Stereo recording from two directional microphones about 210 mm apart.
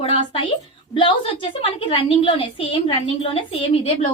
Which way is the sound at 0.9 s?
25° left (ahead or behind).